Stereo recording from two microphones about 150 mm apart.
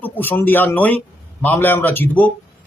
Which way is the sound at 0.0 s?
15° left (ahead or behind).